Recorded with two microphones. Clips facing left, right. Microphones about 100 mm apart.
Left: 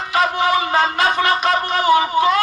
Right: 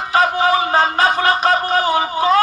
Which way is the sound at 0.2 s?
35° right (ahead or behind).